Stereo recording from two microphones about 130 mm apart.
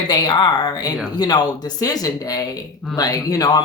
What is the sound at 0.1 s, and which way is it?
Speech, 30° left (ahead or behind).